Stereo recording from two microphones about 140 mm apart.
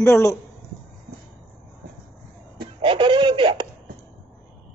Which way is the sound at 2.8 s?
35° right (ahead or behind).